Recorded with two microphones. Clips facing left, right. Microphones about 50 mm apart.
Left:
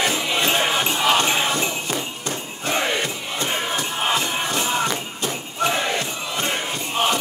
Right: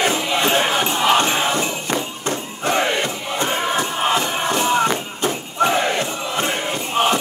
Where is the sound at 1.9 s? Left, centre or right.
Right.